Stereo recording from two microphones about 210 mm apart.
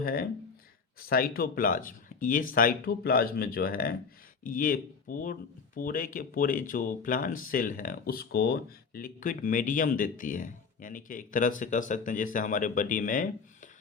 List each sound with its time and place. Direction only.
0.0 s speech: 45° left (ahead or behind)